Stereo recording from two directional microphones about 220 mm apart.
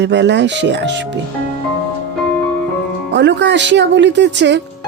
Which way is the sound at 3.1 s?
55° right (ahead or behind).